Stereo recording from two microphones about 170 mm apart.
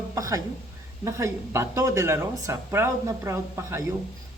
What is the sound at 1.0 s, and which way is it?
Speech, 15° right (ahead or behind).